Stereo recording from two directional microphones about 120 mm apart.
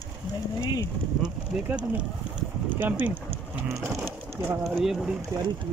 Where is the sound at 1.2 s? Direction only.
10° right (ahead or behind).